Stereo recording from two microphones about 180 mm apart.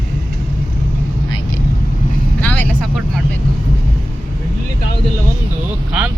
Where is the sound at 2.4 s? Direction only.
10° left (ahead or behind).